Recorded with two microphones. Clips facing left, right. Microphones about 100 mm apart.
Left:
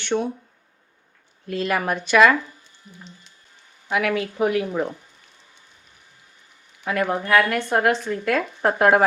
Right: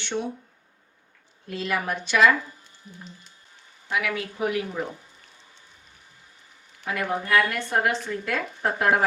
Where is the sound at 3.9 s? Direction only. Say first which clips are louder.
Left 5 dB; 60° left (ahead or behind).